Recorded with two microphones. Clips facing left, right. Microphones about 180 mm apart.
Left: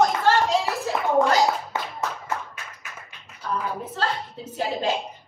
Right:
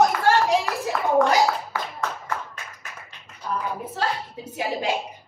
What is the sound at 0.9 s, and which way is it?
Clapping, 20° left (ahead or behind).